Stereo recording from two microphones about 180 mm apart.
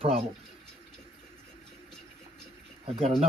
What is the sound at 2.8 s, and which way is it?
Speech, 35° right (ahead or behind).